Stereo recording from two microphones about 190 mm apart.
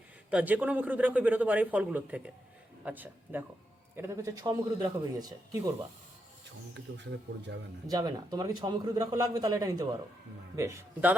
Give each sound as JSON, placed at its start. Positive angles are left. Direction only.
{"t": 0.3, "sound": "a man's voice", "side_deg": -10}
{"t": 6.9, "sound": "speech", "side_deg": -65}
{"t": 7.9, "sound": "a man's voice", "side_deg": -20}